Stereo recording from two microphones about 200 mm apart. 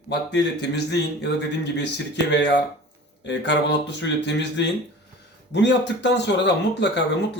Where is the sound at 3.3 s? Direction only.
60° left (ahead or behind).